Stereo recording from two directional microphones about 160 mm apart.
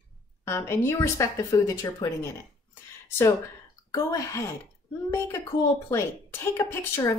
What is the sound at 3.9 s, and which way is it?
Speech, 20° left (ahead or behind).